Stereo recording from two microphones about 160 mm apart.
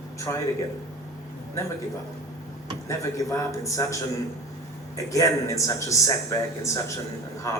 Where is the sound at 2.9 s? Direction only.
20° left (ahead or behind).